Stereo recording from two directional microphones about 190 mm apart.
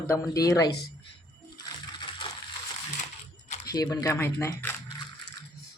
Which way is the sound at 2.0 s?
25° left (ahead or behind).